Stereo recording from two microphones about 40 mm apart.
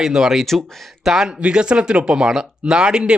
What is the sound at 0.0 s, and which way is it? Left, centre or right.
Speech, centre.